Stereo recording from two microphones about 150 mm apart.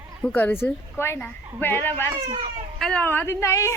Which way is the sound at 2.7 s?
Centre (ahead or behind).